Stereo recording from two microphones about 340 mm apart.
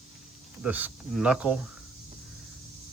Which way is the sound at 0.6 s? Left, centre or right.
Centre.